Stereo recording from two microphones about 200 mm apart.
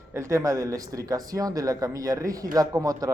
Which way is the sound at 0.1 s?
15° right (ahead or behind).